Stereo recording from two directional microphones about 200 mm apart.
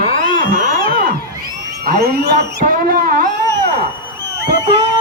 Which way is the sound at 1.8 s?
55° right (ahead or behind).